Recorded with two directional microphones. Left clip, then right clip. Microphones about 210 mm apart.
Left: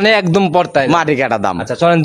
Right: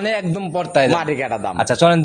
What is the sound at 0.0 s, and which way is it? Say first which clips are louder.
Speech: left 10 dB; 45° left (ahead or behind).